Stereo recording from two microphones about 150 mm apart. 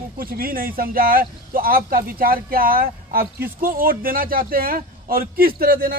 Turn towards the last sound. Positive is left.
turn(degrees=-80)